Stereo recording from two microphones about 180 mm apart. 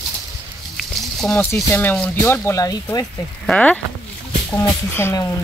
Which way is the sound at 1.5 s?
15° left (ahead or behind).